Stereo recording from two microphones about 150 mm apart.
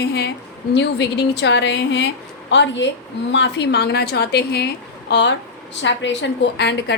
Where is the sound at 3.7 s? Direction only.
90° left.